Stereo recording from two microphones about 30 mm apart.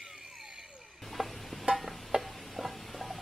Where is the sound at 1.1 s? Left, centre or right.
Centre.